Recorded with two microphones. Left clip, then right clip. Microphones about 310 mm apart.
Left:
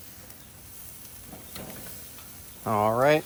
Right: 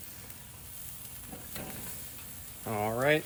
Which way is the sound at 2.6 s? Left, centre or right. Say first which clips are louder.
Left 7 dB; left.